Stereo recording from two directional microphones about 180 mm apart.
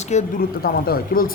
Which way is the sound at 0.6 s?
55° left (ahead or behind).